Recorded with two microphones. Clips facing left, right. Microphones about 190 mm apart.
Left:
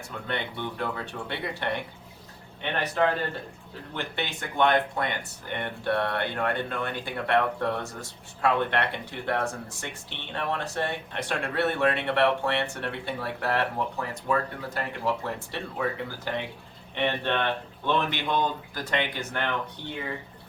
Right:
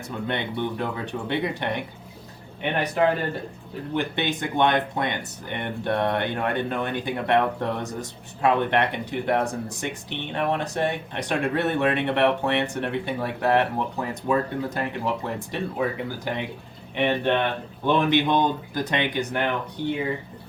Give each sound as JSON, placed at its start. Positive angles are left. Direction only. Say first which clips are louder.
{"t": 0.3, "sound": "speech", "louder": "right 5 dB", "side_deg": -20}